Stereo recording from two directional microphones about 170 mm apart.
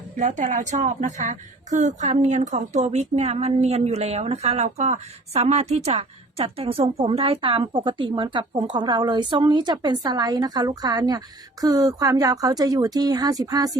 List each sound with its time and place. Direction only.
0.2 s speech: 45° right (ahead or behind); by 13.7 s 20° right (ahead or behind)